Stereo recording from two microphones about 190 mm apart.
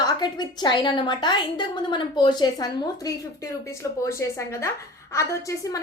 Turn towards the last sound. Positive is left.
turn(degrees=15)  # may be behind; listen again after turning